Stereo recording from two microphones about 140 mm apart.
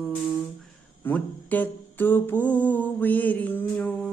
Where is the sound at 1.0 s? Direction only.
10° left (ahead or behind).